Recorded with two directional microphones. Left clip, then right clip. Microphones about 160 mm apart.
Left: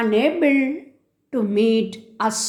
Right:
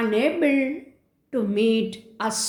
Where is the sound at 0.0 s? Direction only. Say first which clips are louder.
Left 3 dB; 25° left (ahead or behind).